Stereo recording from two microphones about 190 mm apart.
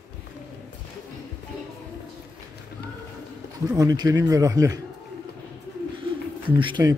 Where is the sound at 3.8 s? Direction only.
20° right (ahead or behind).